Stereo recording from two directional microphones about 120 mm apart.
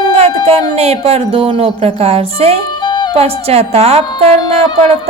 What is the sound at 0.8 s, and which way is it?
Speech, 60° right (ahead or behind).